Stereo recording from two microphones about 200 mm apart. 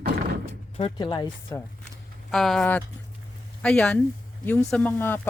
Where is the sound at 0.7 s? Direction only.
25° left (ahead or behind).